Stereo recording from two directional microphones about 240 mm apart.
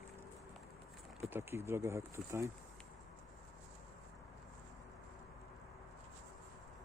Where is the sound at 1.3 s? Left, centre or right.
Centre.